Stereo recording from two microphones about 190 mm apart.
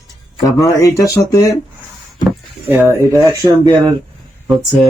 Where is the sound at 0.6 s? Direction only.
15° left (ahead or behind).